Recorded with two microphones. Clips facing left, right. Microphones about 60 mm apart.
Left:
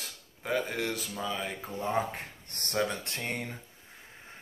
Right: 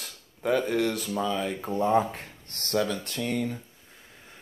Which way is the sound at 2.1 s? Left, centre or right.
Left.